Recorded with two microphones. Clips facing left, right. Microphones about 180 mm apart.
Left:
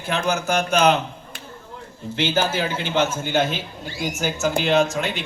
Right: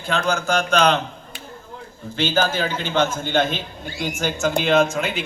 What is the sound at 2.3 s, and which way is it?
A man's voice, 15° left (ahead or behind).